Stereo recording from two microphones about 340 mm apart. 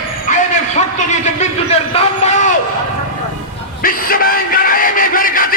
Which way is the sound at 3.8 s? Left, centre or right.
Left.